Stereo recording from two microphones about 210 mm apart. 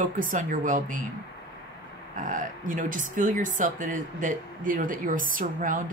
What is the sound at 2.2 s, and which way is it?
Speech, 40° right (ahead or behind).